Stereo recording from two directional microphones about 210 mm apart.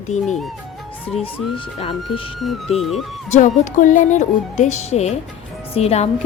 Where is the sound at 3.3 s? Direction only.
35° left (ahead or behind).